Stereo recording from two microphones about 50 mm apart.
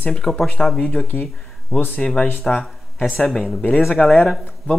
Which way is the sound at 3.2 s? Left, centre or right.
Centre.